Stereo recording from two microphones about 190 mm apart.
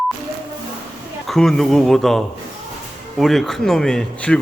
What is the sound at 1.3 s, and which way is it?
Speech, centre (ahead or behind).